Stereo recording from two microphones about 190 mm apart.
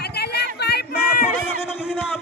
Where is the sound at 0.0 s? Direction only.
60° left (ahead or behind).